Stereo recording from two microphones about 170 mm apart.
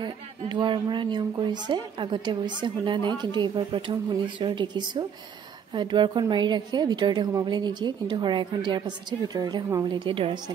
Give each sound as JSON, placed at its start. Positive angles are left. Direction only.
{"t": 0.0, "sound": "a woman's voice", "side_deg": -25}